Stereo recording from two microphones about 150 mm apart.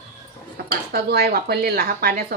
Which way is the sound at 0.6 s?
90° right.